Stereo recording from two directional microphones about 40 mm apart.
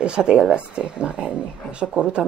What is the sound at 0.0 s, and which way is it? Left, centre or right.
Speech, right.